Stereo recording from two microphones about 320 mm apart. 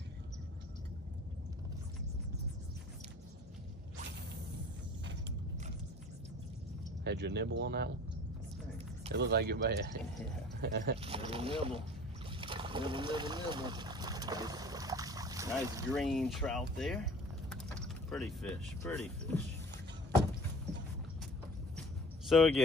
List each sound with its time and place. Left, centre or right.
7.1 s speech: right
9.1 s speech: right
11.0 s speech: centre
12.4 s boat: centre
15.9 s speech: centre
21.7 s a sound: centre